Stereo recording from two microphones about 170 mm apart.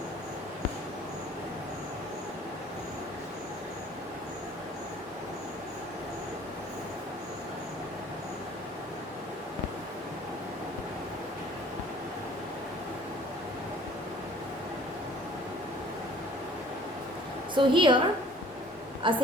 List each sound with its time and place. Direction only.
17.5 s a woman's voice: 30° right (ahead or behind)
19.0 s a woman's voice: 30° right (ahead or behind)